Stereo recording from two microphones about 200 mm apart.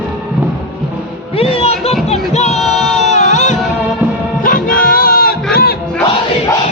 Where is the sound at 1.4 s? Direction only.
30° left (ahead or behind).